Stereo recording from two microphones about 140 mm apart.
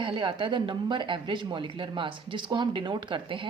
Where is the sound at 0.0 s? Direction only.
35° right (ahead or behind).